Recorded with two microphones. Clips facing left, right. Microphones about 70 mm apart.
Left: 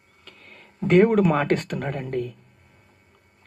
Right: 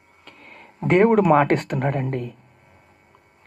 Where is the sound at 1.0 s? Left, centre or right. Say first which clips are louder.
Right 3 dB; right.